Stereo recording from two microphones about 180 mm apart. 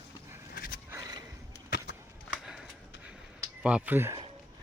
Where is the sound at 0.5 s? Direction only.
55° left (ahead or behind).